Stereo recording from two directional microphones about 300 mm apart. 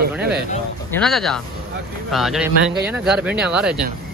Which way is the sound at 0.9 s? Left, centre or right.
Centre.